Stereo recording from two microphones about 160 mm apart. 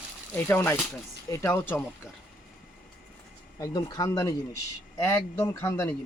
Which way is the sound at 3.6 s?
25° left (ahead or behind).